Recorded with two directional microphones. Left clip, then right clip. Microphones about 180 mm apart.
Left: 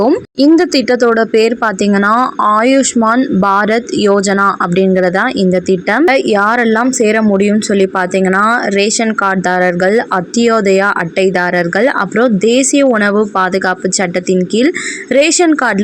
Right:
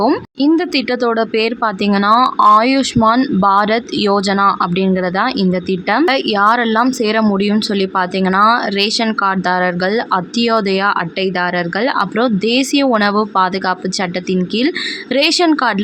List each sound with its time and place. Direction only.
0.3 s speech: 30° left (ahead or behind)